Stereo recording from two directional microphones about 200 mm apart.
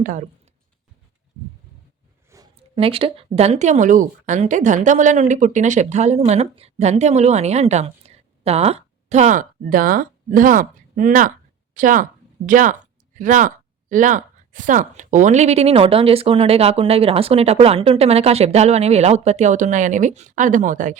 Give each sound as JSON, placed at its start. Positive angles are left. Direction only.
{"t": 0.0, "sound": "speech", "side_deg": -40}
{"t": 2.3, "sound": "a sound", "side_deg": -15}
{"t": 2.7, "sound": "a woman's voice", "side_deg": -30}